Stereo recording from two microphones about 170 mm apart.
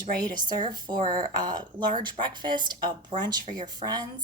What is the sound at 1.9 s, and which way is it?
Speech, 25° right (ahead or behind).